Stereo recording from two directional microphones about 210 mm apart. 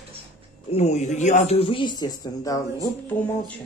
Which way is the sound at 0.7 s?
30° left (ahead or behind).